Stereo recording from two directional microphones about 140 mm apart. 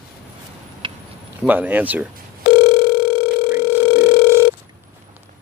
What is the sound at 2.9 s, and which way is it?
Dial tone, 90° left.